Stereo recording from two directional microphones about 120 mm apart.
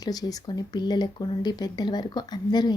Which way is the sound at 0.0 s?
30° left (ahead or behind).